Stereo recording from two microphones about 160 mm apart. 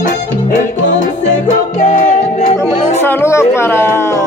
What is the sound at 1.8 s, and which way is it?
Music, 50° left (ahead or behind).